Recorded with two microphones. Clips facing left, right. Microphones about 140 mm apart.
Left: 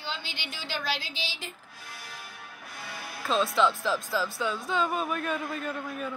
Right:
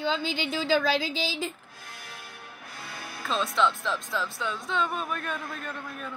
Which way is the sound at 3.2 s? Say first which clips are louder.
Left 1 dB; centre (ahead or behind).